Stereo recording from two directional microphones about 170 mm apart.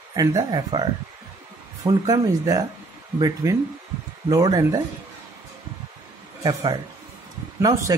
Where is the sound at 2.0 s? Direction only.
20° right (ahead or behind).